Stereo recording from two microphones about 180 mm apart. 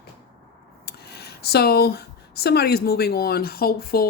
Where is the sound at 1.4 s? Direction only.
60° left (ahead or behind).